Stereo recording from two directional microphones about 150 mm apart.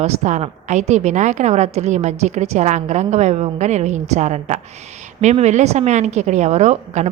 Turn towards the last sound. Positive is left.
turn(degrees=-50)  # may be behind; listen again after turning